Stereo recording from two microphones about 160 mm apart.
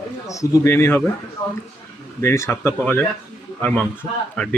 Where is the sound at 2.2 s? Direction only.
15° left (ahead or behind).